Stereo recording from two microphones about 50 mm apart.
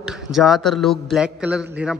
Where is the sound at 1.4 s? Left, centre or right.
Right.